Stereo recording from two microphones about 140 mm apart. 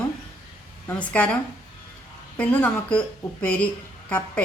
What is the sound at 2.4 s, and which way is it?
A woman's voice, 10° left (ahead or behind).